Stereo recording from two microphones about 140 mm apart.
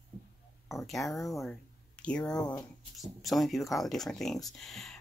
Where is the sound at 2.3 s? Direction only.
30° left (ahead or behind).